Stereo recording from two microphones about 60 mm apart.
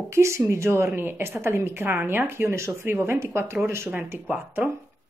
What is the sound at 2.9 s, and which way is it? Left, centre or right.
A woman's voice, right.